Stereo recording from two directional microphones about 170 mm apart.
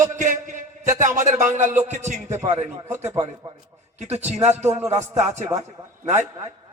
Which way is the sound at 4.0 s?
40° right (ahead or behind).